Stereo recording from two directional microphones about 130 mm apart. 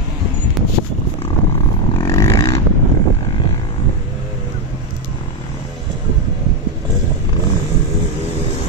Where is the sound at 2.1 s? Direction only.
25° left (ahead or behind).